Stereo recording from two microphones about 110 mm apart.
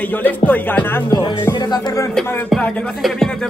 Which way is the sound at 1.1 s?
40° left (ahead or behind).